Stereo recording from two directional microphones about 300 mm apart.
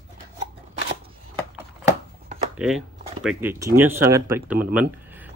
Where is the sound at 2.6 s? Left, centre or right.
Centre.